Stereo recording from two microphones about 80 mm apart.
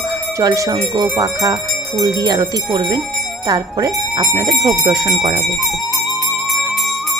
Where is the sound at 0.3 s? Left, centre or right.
Right.